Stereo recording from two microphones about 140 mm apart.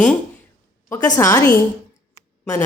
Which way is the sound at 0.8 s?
20° left (ahead or behind).